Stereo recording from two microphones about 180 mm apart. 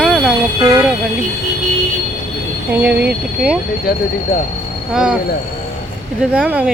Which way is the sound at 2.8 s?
10° right (ahead or behind).